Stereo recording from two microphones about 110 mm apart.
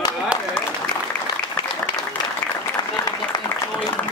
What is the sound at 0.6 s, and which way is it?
Applause, 10° left (ahead or behind).